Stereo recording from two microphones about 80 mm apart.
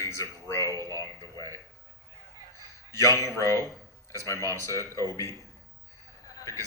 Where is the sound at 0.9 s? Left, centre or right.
Left.